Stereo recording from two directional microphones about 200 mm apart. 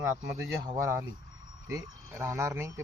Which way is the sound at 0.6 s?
15° right (ahead or behind).